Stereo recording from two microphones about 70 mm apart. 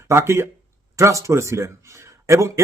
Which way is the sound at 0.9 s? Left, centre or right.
Right.